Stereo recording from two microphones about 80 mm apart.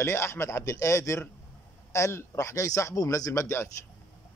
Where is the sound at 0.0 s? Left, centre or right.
Left.